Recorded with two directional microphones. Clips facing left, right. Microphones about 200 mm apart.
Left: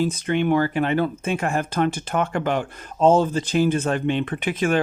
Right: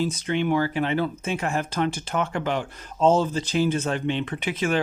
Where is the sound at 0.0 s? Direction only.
55° left (ahead or behind).